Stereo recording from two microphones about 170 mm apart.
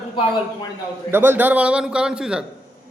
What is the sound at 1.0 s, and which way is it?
A man's voice, 15° right (ahead or behind).